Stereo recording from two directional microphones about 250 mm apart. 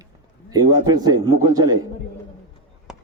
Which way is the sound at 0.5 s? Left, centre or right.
Centre.